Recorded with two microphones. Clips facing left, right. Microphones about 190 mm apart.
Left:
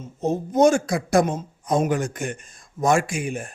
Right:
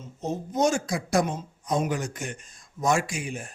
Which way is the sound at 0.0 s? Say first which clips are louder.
Left 7 dB; 50° left (ahead or behind).